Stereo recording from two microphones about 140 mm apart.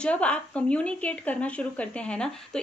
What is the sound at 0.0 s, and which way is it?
Speech, 10° left (ahead or behind).